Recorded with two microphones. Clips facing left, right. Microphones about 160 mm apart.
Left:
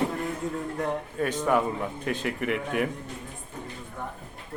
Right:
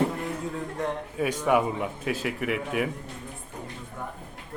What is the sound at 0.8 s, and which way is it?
A man's voice, 5° right (ahead or behind).